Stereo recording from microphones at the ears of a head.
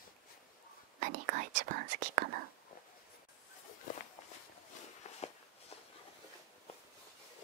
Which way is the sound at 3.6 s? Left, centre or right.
Left.